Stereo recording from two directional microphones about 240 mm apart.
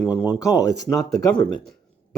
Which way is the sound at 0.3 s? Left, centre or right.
Centre.